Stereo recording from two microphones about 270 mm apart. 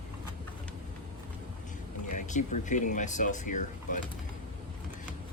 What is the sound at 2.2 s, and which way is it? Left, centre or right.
Speech, left.